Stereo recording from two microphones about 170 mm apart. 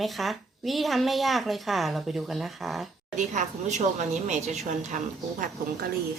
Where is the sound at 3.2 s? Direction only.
45° right (ahead or behind).